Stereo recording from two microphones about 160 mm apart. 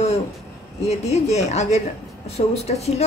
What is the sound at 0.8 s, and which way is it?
A woman's voice, 45° left (ahead or behind).